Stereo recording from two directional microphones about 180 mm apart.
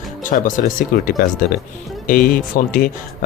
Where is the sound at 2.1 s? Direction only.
45° left (ahead or behind).